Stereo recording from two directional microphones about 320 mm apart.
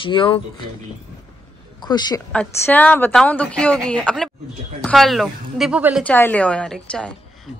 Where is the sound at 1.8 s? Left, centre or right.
Centre.